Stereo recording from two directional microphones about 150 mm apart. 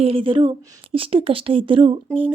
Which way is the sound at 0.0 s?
35° right (ahead or behind).